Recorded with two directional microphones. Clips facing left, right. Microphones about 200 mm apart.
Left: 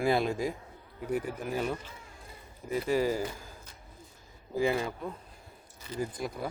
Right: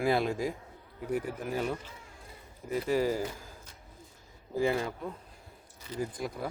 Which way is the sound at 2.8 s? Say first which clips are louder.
Even; 10° left (ahead or behind).